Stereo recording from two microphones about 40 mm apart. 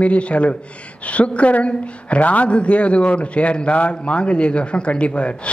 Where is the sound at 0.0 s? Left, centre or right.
Left.